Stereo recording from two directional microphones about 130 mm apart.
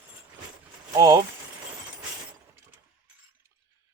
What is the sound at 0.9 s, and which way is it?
Speech, 25° right (ahead or behind).